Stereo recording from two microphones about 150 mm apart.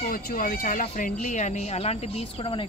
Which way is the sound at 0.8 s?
55° left (ahead or behind).